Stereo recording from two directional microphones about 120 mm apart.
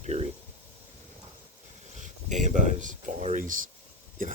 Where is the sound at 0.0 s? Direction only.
70° right (ahead or behind).